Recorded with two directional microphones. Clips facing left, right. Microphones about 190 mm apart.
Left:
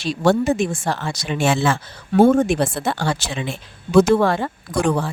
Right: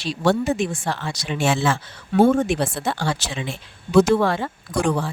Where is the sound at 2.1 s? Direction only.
45° left (ahead or behind).